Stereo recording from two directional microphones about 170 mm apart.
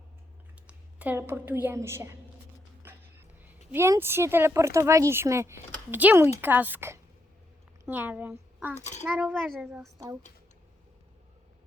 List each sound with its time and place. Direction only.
0.7 s a woman's voice: 10° right (ahead or behind)
3.7 s speech: 15° right (ahead or behind)
8.8 s a child's voice: 45° left (ahead or behind)
9.0 s a child's voice: 5° right (ahead or behind)